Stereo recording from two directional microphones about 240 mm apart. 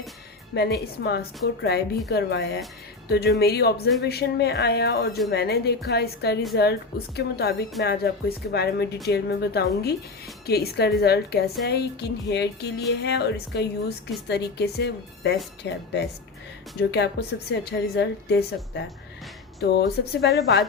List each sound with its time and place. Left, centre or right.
0.5 s a woman's voice: left
16.9 s a woman's voice: left